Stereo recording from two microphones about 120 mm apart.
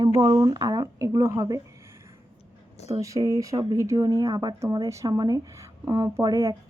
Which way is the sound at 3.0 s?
25° right (ahead or behind).